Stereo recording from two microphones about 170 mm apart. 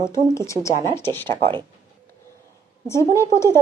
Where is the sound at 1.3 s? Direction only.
30° right (ahead or behind).